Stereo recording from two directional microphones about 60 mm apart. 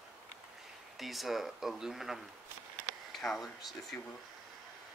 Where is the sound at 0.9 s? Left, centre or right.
Centre.